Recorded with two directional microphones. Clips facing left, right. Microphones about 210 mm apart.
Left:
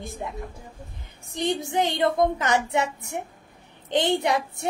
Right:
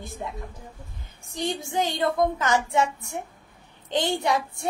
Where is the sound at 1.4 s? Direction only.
20° left (ahead or behind).